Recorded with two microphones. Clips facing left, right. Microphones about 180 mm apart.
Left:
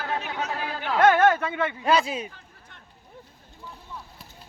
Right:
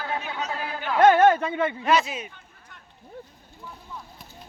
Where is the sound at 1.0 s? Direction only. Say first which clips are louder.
Right 2 dB; 15° right (ahead or behind).